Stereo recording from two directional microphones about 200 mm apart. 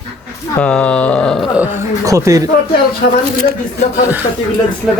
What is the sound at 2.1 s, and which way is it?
Speech, 15° right (ahead or behind).